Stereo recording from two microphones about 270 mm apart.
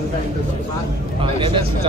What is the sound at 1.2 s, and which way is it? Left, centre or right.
Speech, centre.